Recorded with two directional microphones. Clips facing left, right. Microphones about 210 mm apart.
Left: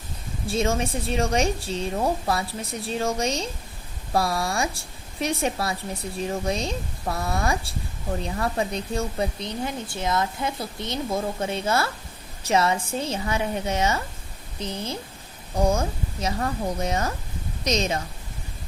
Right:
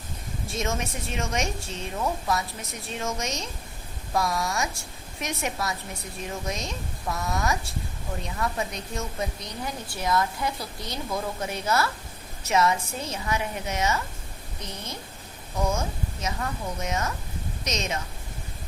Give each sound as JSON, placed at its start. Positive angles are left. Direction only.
{"t": 0.4, "sound": "a woman's voice", "side_deg": 30}